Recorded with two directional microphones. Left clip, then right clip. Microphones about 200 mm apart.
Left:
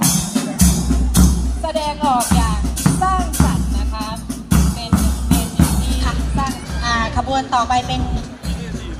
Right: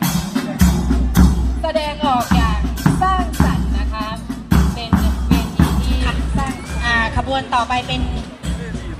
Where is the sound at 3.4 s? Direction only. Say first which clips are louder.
Even; 40° left (ahead or behind).